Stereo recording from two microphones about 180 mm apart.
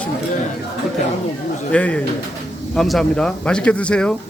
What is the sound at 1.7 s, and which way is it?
A man's voice, 5° left (ahead or behind).